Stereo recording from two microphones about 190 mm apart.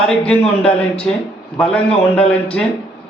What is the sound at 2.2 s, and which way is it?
Speech, 5° left (ahead or behind).